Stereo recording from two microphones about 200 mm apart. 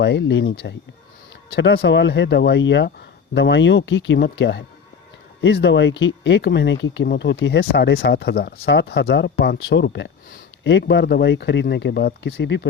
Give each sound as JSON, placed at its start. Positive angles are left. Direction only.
{"t": 0.0, "sound": "speech", "side_deg": 65}
{"t": 1.5, "sound": "speech", "side_deg": 60}